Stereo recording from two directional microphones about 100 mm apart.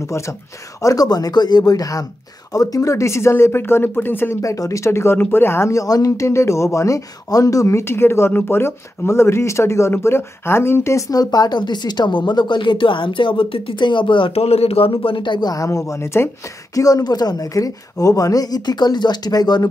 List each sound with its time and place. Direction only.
0.8 s speech: 40° left (ahead or behind); by 14.3 s 55° left (ahead or behind)
14.3 s a man's voice: 90° left; by 15.5 s 50° left (ahead or behind)
15.5 s speech: 35° left (ahead or behind)
16.7 s speech: 35° left (ahead or behind)